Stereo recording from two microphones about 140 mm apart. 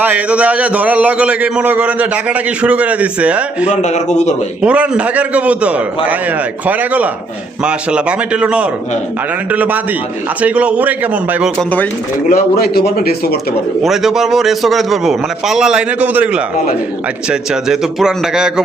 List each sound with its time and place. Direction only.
0.0 s a man's voice: 10° right (ahead or behind)
3.7 s a man's voice: 55° left (ahead or behind)
4.6 s a man's voice: 10° right (ahead or behind)
12.3 s speech: 90° left
13.8 s a man's voice: centre (ahead or behind)